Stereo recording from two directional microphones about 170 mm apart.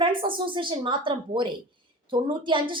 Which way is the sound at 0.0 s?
30° right (ahead or behind).